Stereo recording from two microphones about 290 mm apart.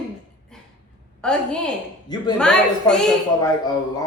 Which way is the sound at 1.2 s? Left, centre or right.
Centre.